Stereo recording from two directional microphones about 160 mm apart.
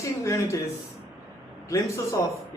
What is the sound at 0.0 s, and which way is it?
Speech, 20° left (ahead or behind).